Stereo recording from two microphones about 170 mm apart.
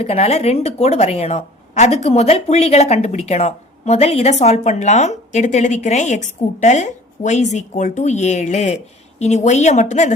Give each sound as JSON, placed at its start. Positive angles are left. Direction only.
{"t": 0.0, "sound": "a woman's voice", "side_deg": 40}